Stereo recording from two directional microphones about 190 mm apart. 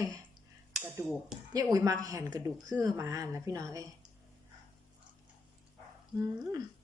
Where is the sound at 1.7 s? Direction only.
20° right (ahead or behind).